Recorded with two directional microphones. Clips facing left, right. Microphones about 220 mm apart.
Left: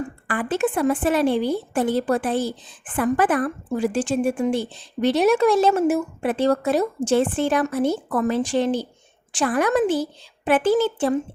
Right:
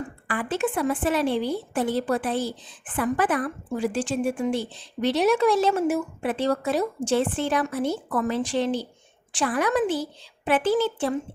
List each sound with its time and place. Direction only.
0.3 s a woman's voice: 50° left (ahead or behind)